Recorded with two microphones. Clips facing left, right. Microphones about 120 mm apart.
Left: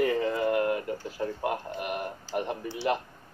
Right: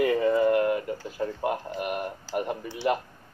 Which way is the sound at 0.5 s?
25° left (ahead or behind).